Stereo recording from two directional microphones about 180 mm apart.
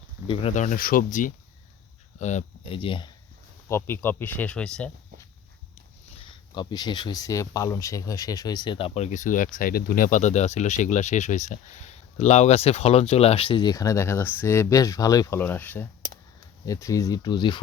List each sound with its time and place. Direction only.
0.3 s speech: 40° left (ahead or behind)
3.7 s speech: 10° left (ahead or behind)
6.1 s speech: 25° left (ahead or behind)